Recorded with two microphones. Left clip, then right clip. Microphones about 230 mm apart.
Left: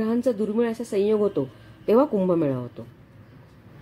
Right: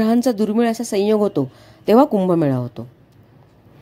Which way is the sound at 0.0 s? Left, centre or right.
Right.